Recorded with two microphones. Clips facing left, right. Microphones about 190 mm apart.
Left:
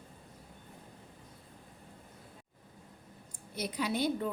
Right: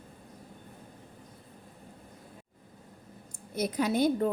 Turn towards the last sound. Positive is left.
turn(degrees=-45)  # may be behind; listen again after turning